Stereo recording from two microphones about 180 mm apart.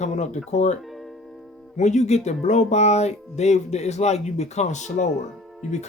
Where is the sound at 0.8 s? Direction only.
Centre (ahead or behind).